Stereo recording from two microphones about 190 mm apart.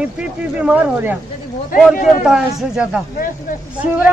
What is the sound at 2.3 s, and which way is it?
Speech, 5° right (ahead or behind).